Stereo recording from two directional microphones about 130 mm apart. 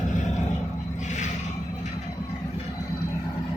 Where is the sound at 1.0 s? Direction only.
65° left (ahead or behind).